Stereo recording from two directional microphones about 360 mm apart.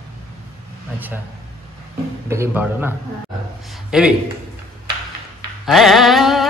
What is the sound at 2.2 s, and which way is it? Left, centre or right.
Speech, centre.